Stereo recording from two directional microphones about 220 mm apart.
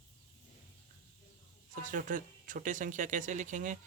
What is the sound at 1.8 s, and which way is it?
Speech, 35° right (ahead or behind).